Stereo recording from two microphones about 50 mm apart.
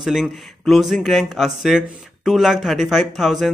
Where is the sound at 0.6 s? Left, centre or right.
Centre.